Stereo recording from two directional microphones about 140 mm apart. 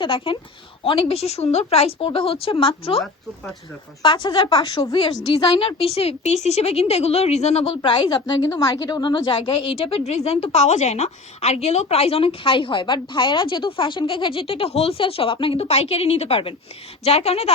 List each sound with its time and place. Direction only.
0.0 s a woman's voice: 40° left (ahead or behind)
4.0 s a woman's voice: 35° left (ahead or behind)
5.3 s a woman's voice: 40° left (ahead or behind)